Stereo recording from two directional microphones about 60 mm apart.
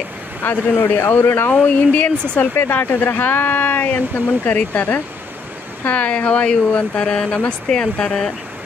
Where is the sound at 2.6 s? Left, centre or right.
Left; by 8.3 s centre.